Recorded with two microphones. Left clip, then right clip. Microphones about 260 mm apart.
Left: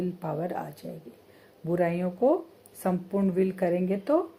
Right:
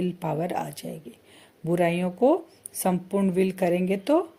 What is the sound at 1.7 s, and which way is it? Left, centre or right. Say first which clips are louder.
Speech: right 3 dB; right.